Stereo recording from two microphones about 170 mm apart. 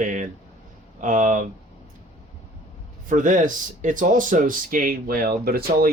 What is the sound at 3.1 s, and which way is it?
Speech, 50° right (ahead or behind).